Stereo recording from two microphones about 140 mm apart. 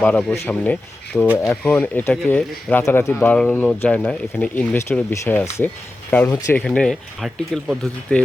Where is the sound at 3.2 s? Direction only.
10° left (ahead or behind).